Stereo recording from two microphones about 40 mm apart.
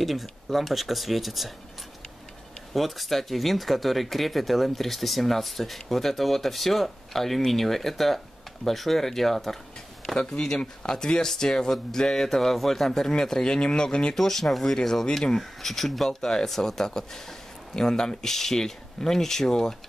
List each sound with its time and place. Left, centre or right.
0.0 s speech: centre
2.7 s speech: centre
10.1 s speech: centre
14.1 s speech: centre
16.1 s speech: centre